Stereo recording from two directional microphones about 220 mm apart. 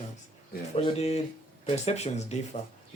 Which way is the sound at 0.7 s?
25° left (ahead or behind).